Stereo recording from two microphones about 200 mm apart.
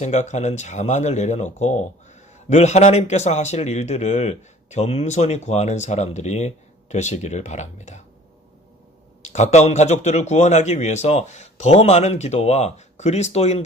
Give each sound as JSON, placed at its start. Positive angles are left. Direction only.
{"t": 0.0, "sound": "speech", "side_deg": 35}
{"t": 9.2, "sound": "speech", "side_deg": 35}